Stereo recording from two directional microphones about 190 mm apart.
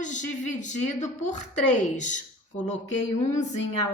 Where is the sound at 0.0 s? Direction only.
40° left (ahead or behind).